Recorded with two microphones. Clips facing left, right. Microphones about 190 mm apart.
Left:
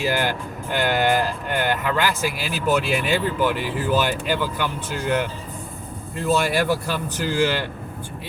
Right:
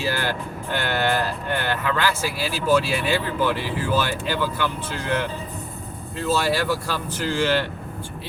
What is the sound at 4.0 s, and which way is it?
Speech, 15° left (ahead or behind).